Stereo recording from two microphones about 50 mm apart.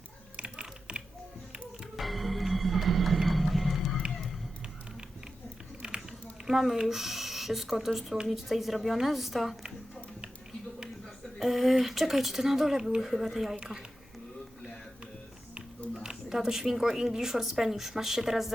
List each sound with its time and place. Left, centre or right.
0.3 s typing: centre
2.0 s music: centre
5.8 s a sound: centre
6.5 s speech: centre
11.3 s speech: centre
16.0 s speech: centre